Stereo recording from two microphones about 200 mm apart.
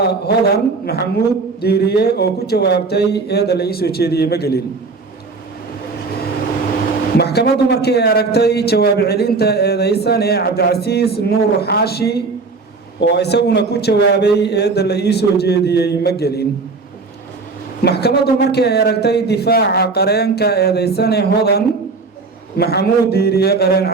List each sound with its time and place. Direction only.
0.0 s speech: 55° left (ahead or behind)
7.2 s a man's voice: 55° left (ahead or behind)
17.8 s speech: 55° left (ahead or behind)